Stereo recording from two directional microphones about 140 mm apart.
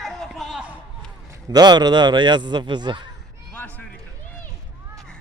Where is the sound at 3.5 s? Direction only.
10° left (ahead or behind).